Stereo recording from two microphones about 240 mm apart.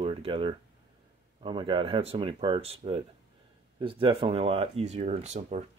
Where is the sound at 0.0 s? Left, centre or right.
Right.